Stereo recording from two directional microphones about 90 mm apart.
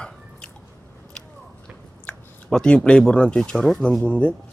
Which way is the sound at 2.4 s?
5° left (ahead or behind).